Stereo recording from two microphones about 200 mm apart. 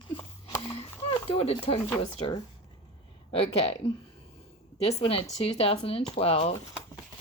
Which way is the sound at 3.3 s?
30° left (ahead or behind).